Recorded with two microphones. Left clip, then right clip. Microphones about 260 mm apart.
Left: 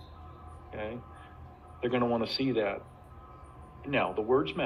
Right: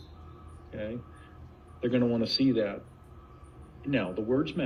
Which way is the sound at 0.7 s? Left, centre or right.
Right.